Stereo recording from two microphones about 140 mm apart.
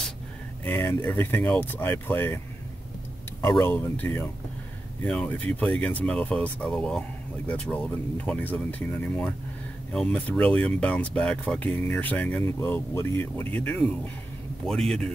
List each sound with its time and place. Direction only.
0.7 s speech: 15° left (ahead or behind)
3.6 s a man's voice: 15° left (ahead or behind)